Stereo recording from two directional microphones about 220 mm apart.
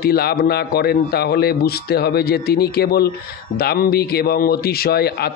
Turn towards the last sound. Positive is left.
turn(degrees=45)  # may be behind; listen again after turning